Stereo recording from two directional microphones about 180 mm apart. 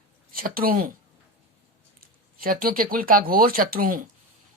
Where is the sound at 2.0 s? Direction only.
55° right (ahead or behind).